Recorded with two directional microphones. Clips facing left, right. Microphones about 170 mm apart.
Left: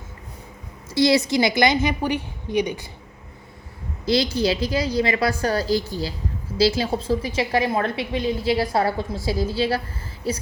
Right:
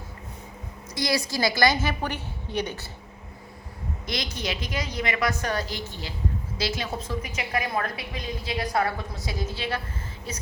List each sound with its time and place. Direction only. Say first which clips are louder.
0.9 s a woman's voice: left 9 dB; 25° left (ahead or behind)
4.0 s a woman's voice: left 12 dB; 30° left (ahead or behind)